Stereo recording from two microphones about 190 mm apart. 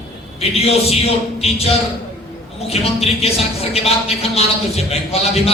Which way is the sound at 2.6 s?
35° left (ahead or behind).